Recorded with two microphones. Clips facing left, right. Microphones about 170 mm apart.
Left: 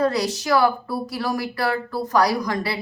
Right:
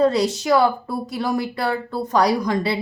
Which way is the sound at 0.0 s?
25° right (ahead or behind).